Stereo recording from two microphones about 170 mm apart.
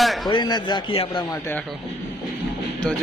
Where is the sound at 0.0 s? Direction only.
Centre (ahead or behind).